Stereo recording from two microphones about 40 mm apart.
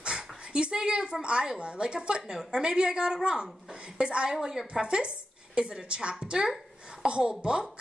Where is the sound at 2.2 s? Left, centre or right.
Centre.